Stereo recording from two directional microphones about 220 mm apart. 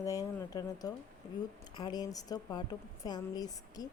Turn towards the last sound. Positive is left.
turn(degrees=15)  # may be behind; listen again after turning